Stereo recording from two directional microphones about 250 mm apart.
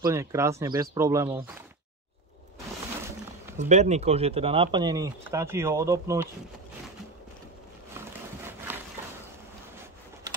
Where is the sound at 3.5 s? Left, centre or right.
Right; by 6.2 s centre.